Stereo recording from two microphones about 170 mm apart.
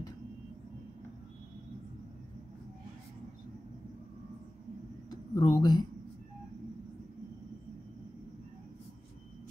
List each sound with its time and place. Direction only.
5.3 s speech: 25° left (ahead or behind)